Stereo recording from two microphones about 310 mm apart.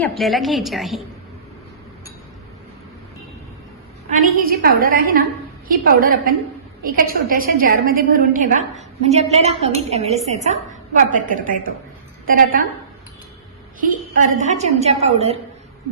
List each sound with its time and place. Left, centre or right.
0.0 s a woman's voice: centre
4.2 s a woman's voice: right
13.8 s a woman's voice: right